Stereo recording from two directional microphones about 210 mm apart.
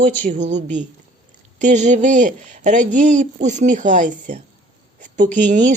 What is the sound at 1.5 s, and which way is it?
Speech, 35° right (ahead or behind).